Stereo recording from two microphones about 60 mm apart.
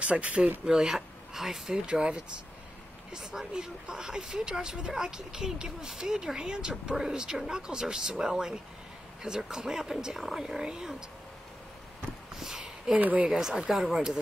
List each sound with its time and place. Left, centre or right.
0.0 s speech: right
0.7 s speech: centre
12.4 s a sound: centre
12.9 s speech: right
13.3 s speech: centre